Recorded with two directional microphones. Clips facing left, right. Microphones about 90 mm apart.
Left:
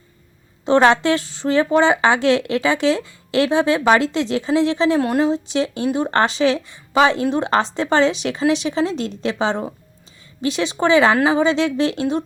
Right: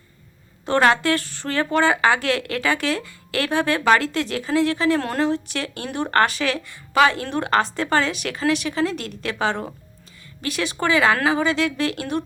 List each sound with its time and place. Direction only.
0.6 s a woman's voice: 20° left (ahead or behind)
4.9 s a woman's voice: 10° left (ahead or behind)